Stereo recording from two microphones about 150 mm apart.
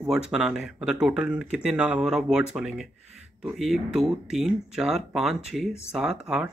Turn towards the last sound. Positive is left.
turn(degrees=-5)  # may be behind; listen again after turning